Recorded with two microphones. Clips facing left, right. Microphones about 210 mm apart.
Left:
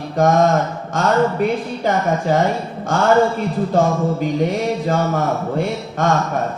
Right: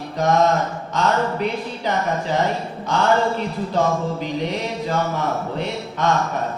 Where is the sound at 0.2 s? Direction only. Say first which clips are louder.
Left 3 dB; 50° left (ahead or behind).